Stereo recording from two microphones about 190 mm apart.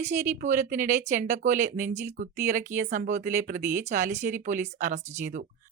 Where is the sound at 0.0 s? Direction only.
40° right (ahead or behind).